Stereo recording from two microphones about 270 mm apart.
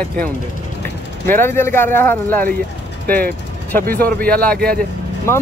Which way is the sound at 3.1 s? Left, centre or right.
Right.